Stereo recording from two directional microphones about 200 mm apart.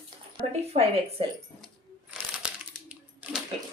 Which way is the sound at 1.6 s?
5° right (ahead or behind).